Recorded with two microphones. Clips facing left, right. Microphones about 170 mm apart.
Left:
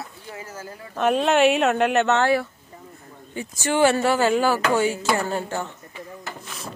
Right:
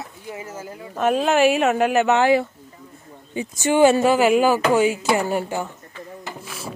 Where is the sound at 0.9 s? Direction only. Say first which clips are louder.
Right 1 dB; centre (ahead or behind).